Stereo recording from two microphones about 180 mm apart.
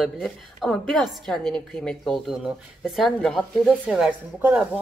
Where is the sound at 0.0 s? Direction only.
Centre (ahead or behind).